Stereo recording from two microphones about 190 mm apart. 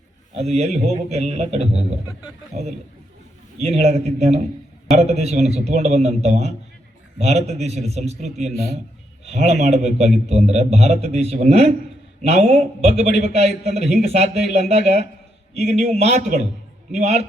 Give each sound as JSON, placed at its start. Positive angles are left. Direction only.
{"t": 0.3, "sound": "a man's voice", "side_deg": -35}